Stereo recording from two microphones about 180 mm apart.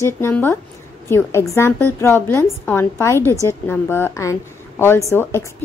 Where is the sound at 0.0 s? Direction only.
10° left (ahead or behind).